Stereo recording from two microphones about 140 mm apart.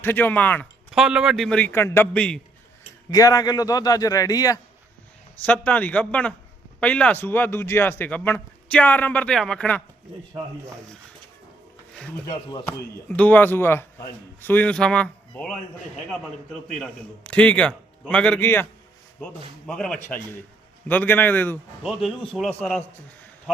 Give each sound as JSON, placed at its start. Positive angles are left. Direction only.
{"t": 0.0, "sound": "speech", "side_deg": 15}
{"t": 0.9, "sound": "speech", "side_deg": -5}
{"t": 1.5, "sound": "speech", "side_deg": 10}
{"t": 3.1, "sound": "a man's voice", "side_deg": 25}
{"t": 5.5, "sound": "speech", "side_deg": 10}
{"t": 13.1, "sound": "speech", "side_deg": 10}
{"t": 16.7, "sound": "speech", "side_deg": 10}
{"t": 20.0, "sound": "speech", "side_deg": 15}
{"t": 21.8, "sound": "speech", "side_deg": 0}